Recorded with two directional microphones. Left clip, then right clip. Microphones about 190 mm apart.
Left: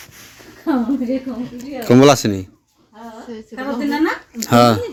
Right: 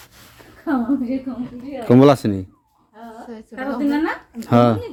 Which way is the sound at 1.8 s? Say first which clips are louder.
Left 2 dB; 10° right (ahead or behind).